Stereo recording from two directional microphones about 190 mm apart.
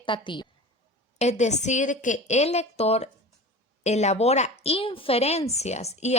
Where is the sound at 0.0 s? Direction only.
25° left (ahead or behind).